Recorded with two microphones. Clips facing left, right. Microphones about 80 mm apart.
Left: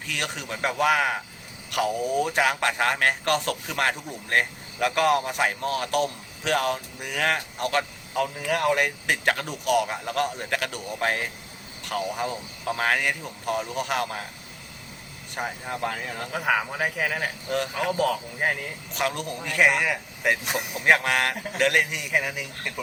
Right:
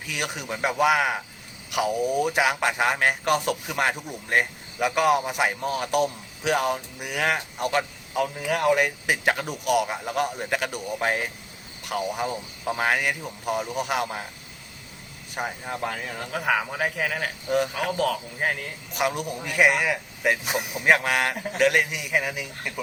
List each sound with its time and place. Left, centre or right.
0.0 s a man's voice: centre
15.4 s a man's voice: centre
18.9 s a man's voice: centre